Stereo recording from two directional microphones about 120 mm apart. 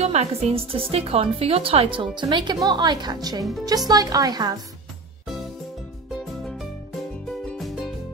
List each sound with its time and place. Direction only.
0.0 s a woman's voice: 65° right (ahead or behind); by 4.6 s 35° right (ahead or behind)
7.4 s music: centre (ahead or behind)